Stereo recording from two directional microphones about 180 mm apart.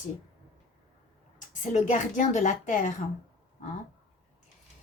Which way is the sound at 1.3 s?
45° left (ahead or behind).